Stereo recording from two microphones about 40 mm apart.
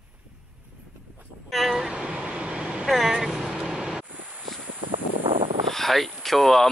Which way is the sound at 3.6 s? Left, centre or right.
Centre.